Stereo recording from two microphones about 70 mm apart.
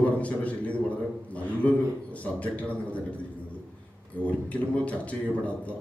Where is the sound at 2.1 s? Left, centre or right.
Left.